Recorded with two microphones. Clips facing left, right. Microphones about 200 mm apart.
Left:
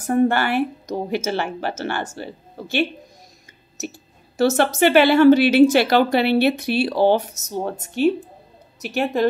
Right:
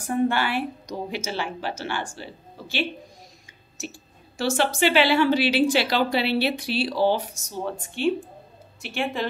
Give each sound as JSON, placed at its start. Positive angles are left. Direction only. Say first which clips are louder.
{"t": 0.0, "sound": "a woman's voice", "louder": "left 5 dB", "side_deg": 50}
{"t": 4.4, "sound": "a woman's voice", "louder": "left 6 dB", "side_deg": 45}